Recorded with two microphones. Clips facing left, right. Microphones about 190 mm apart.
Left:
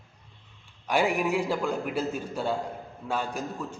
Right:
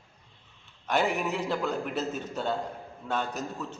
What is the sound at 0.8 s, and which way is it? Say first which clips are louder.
A man's voice: left 2 dB; 10° left (ahead or behind).